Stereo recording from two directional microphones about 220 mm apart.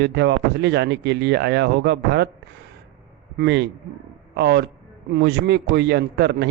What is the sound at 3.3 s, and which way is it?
A man's voice, 50° right (ahead or behind).